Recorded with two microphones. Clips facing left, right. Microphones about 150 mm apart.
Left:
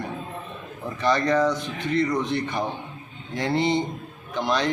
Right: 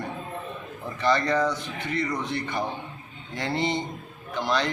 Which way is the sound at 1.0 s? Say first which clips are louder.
Left 2 dB; 15° left (ahead or behind).